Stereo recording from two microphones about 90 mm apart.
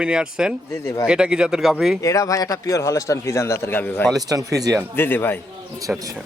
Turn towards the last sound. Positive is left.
turn(degrees=-10)  # may be behind; listen again after turning